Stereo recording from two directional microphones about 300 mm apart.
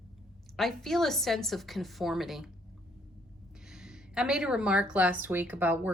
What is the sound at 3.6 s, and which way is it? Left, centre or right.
A woman's voice, centre.